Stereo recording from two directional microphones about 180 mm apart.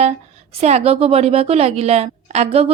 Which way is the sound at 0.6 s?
35° right (ahead or behind).